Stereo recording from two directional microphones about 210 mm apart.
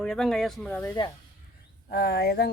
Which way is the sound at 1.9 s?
50° left (ahead or behind).